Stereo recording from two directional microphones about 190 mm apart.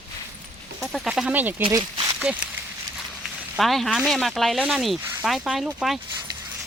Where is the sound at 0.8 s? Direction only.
5° right (ahead or behind).